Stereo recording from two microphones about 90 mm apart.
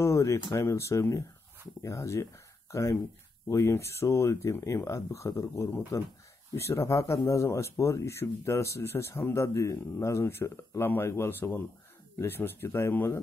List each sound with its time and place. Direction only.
0.0 s speech: 35° left (ahead or behind)